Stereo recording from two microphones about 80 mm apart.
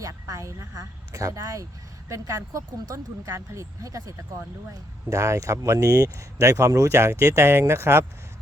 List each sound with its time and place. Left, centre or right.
0.0 s speech: right